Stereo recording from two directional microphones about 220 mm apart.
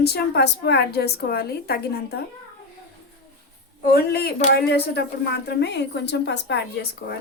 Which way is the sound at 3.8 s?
45° left (ahead or behind).